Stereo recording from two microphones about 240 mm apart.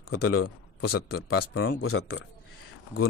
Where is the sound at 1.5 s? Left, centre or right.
Left.